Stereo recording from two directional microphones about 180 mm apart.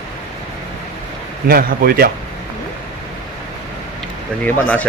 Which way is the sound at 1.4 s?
55° right (ahead or behind).